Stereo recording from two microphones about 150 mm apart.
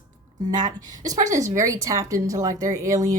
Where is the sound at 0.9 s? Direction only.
25° right (ahead or behind).